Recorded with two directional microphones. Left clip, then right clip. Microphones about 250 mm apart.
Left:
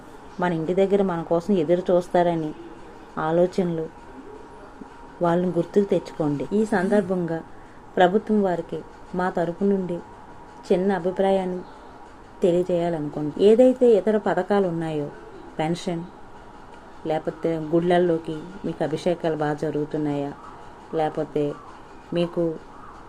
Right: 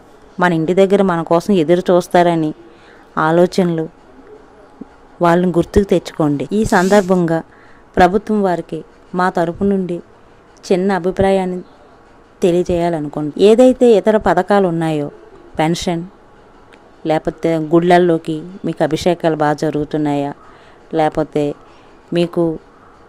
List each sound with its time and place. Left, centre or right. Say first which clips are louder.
0.3 s speech: right 9 dB; right
5.2 s speech: right 9 dB; right
17.1 s speech: right 9 dB; right